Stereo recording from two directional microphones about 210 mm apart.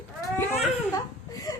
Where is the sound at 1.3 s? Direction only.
15° left (ahead or behind).